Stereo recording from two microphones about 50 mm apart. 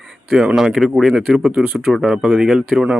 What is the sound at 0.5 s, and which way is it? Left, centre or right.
Speech, centre.